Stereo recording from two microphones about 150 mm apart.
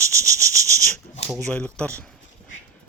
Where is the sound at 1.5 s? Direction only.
10° left (ahead or behind).